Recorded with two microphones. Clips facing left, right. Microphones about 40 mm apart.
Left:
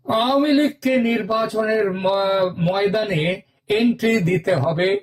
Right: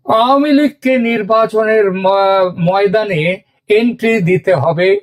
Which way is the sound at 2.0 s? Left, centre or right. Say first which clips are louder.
Right 8 dB; centre.